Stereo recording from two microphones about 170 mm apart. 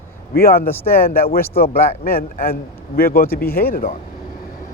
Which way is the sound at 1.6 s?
60° left (ahead or behind).